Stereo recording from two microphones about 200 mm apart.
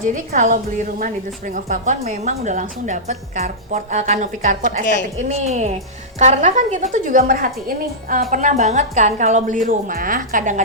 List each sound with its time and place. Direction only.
0.0 s a woman's voice: 40° right (ahead or behind)